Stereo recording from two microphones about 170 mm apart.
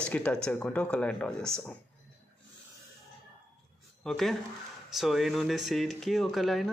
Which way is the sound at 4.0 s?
Centre (ahead or behind).